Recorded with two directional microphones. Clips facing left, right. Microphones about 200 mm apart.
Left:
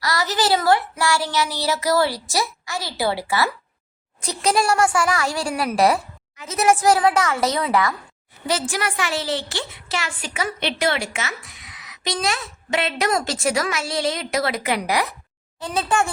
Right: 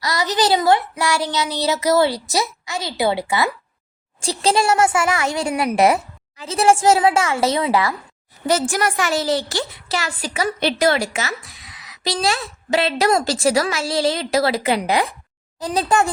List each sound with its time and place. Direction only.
0.0 s speech: 20° right (ahead or behind)
8.4 s a woman's voice: 45° right (ahead or behind); by 15.1 s 25° right (ahead or behind)
15.6 s a woman's voice: 35° right (ahead or behind)